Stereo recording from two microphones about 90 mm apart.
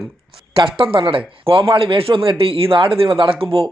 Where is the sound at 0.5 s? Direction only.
75° right (ahead or behind).